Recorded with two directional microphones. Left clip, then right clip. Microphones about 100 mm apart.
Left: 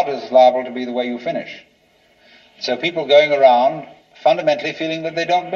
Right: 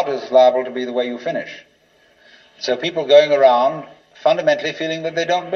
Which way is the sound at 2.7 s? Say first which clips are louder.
Right 1 dB; 35° right (ahead or behind).